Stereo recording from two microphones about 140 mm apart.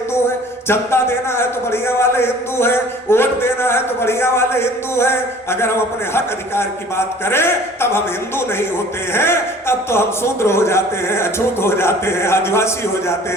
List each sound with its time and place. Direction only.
0.7 s a man's voice: 15° left (ahead or behind)